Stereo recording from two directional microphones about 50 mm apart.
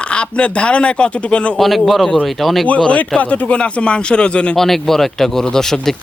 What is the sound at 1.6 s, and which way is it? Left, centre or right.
A man's voice, centre.